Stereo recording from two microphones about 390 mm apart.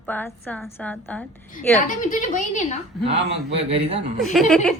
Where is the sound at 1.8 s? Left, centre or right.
Centre.